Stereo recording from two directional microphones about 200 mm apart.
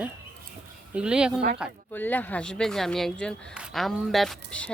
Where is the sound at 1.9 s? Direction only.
10° left (ahead or behind).